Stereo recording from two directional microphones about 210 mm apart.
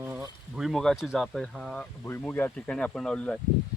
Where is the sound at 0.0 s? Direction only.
10° right (ahead or behind).